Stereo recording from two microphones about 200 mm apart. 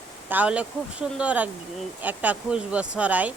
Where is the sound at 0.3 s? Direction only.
5° right (ahead or behind).